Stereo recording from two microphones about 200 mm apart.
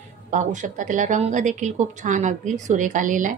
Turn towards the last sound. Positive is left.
turn(degrees=-40)  # may be behind; listen again after turning